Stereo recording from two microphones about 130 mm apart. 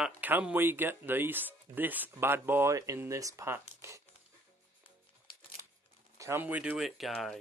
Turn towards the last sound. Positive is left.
turn(degrees=0)  # may be behind; listen again after turning